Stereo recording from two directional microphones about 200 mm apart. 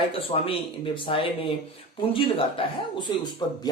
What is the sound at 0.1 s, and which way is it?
Speech, 25° left (ahead or behind).